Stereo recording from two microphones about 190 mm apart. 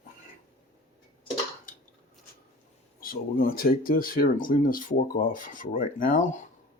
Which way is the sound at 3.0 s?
50° left (ahead or behind).